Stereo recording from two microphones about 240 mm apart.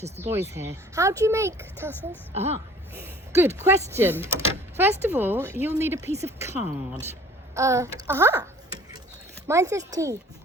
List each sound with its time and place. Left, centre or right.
0.2 s speech: centre
2.3 s speech: right
3.3 s speech: centre
9.5 s speech: centre